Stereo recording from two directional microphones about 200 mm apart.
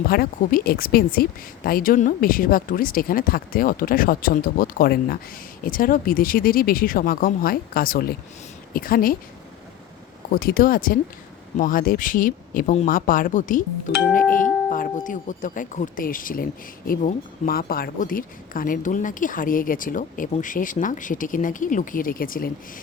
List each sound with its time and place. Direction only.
0.1 s doorbell: 45° left (ahead or behind)
10.3 s doorbell: 45° left (ahead or behind)